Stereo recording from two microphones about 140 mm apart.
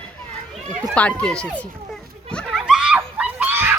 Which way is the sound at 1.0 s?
10° left (ahead or behind).